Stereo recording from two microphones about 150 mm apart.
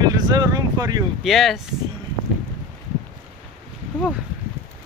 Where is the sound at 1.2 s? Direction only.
Centre (ahead or behind).